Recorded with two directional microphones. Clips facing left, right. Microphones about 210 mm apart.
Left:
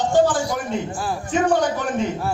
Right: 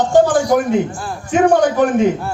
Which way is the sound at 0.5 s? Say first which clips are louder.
Right 12 dB; 55° right (ahead or behind).